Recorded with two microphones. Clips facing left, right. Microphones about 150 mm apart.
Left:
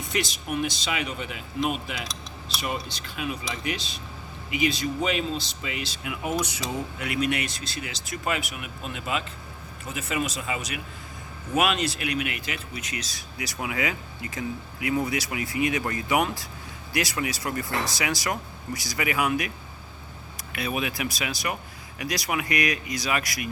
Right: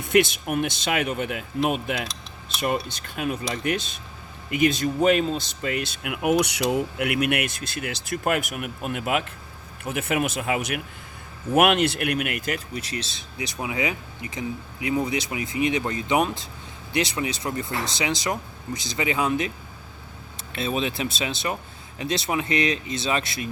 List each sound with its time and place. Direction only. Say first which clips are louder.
0.0 s speech: right 9 dB; 55° right (ahead or behind); by 19.5 s 25° right (ahead or behind)
20.5 s speech: right 3 dB; 25° right (ahead or behind)